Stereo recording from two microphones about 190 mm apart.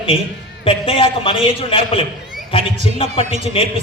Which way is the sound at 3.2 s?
40° right (ahead or behind).